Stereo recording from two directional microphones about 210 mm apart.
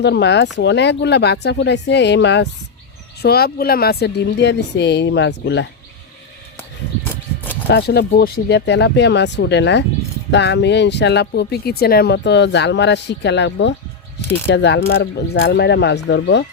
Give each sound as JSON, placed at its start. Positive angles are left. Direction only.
{"t": 0.0, "sound": "a woman's voice", "side_deg": 55}
{"t": 6.6, "sound": "a sound", "side_deg": 10}
{"t": 7.7, "sound": "a woman's voice", "side_deg": 50}